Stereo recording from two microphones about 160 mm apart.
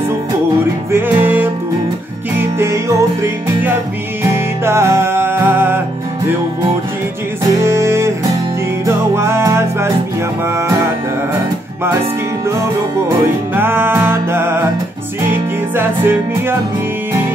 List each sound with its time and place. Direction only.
0.9 s music: 10° right (ahead or behind)
7.6 s music: 15° right (ahead or behind)
13.6 s music: 15° right (ahead or behind)